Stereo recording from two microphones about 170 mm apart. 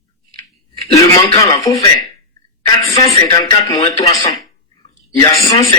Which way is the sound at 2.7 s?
35° left (ahead or behind).